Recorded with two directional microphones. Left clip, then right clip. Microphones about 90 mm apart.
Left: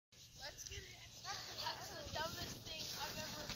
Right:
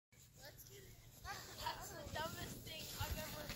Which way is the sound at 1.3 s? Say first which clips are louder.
Left 1 dB; 30° right (ahead or behind).